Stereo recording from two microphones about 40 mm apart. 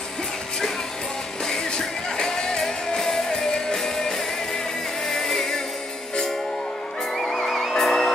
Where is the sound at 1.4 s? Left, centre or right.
Centre.